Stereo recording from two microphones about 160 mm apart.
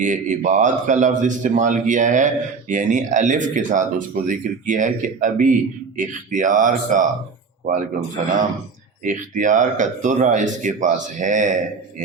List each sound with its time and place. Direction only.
0.0 s a man's voice: 50° right (ahead or behind)
9.0 s a man's voice: 55° right (ahead or behind)